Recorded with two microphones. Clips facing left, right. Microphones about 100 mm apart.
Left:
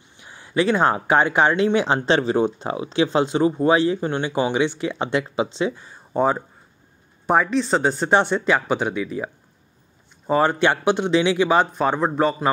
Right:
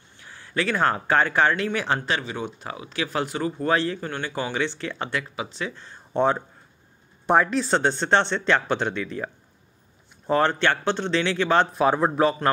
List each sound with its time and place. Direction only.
0.2 s speech: 20° left (ahead or behind)
5.8 s a man's voice: 10° left (ahead or behind)